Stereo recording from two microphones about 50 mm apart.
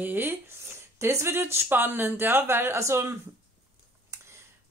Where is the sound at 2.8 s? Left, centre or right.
Right.